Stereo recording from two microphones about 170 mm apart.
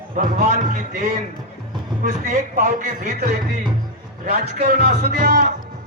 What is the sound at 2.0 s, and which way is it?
A man's voice, 45° right (ahead or behind).